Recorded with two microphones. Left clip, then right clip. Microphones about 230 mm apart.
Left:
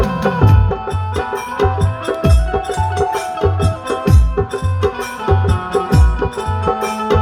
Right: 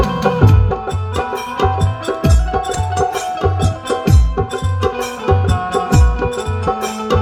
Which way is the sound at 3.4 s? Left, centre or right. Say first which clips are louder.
Left 1 dB; right.